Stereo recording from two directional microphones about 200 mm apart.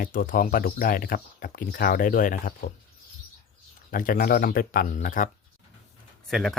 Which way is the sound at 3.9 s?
45° left (ahead or behind).